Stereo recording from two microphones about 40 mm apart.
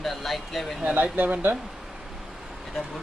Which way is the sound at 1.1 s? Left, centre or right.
Right.